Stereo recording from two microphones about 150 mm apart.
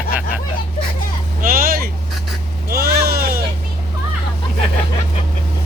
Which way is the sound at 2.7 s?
90° right.